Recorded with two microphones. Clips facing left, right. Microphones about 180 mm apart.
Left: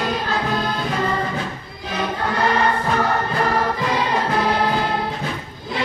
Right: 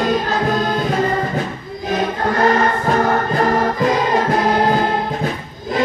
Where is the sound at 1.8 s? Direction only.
45° right (ahead or behind).